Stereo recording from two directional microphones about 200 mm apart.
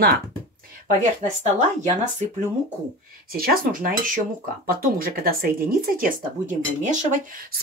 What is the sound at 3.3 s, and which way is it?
Speech, 45° right (ahead or behind).